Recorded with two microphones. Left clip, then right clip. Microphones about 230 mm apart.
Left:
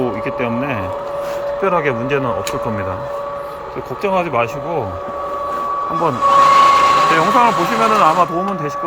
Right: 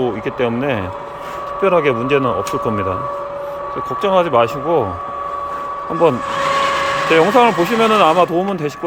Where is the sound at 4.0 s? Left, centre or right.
Centre.